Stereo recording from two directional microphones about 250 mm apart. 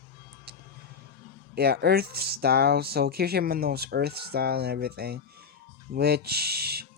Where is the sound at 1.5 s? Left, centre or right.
Right.